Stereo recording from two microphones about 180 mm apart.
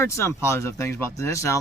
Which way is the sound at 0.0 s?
15° left (ahead or behind).